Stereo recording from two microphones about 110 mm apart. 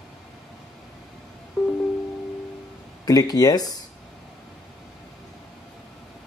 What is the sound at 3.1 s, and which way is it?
Speech, 35° left (ahead or behind).